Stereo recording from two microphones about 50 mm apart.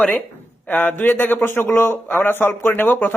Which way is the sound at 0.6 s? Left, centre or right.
Left.